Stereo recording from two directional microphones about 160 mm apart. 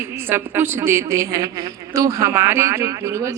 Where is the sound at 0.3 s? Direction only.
15° right (ahead or behind).